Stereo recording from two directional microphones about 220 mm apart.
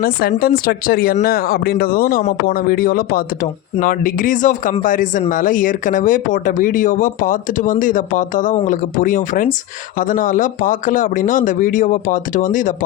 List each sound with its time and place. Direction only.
0.0 s speech: 40° left (ahead or behind)